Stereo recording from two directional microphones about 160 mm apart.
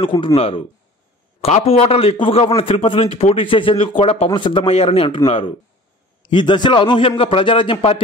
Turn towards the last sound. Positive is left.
turn(degrees=30)  # may be behind; listen again after turning